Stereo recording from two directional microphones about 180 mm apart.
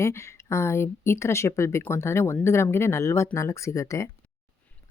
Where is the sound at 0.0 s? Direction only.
15° left (ahead or behind).